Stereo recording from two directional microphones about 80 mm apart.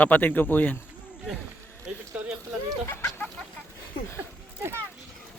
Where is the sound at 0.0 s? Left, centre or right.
Left.